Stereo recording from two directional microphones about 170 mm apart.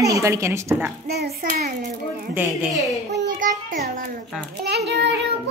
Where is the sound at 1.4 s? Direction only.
50° right (ahead or behind).